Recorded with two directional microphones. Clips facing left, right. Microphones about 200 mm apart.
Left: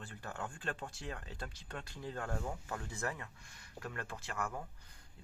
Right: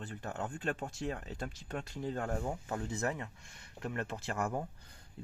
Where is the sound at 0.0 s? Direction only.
20° right (ahead or behind).